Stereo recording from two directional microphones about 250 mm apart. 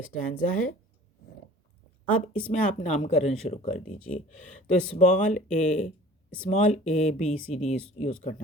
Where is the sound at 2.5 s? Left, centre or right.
Left.